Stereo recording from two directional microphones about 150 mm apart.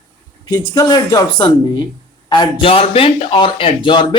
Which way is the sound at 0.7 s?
25° left (ahead or behind).